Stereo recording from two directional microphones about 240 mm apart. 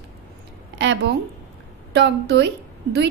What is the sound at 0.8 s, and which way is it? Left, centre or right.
A woman's voice, right.